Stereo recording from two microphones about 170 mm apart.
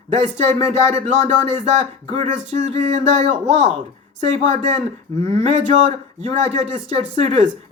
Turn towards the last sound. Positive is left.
turn(degrees=-35)  # may be behind; listen again after turning